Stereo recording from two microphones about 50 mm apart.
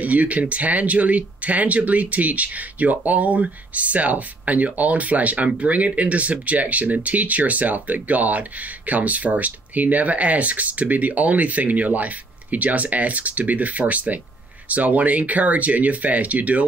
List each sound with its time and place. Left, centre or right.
0.0 s speech: right